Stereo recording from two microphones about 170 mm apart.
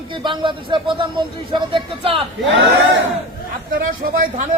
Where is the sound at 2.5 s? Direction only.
90° right.